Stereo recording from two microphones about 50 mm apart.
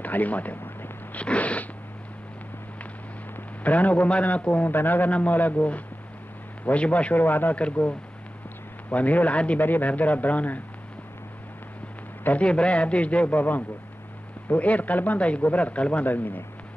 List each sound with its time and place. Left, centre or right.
0.0 s a man's voice: left
3.3 s a man's voice: left
4.6 s speech: left
8.9 s speech: left
12.2 s a man's voice: left
12.4 s speech: left
16.1 s speech: left